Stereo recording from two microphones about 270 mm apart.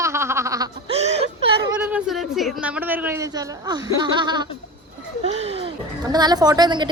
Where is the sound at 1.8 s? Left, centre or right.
Centre.